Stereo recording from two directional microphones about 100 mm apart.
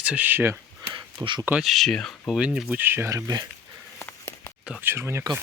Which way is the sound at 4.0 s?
25° left (ahead or behind).